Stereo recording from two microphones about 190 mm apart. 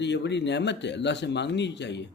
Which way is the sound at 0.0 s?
65° left (ahead or behind).